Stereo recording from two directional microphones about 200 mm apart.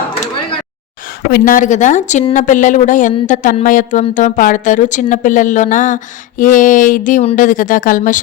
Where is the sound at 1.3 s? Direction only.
45° left (ahead or behind).